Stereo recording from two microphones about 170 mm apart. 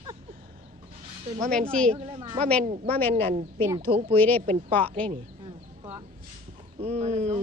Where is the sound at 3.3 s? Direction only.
35° right (ahead or behind).